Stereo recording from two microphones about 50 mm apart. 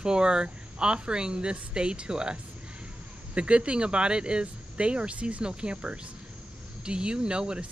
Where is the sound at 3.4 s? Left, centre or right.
Right.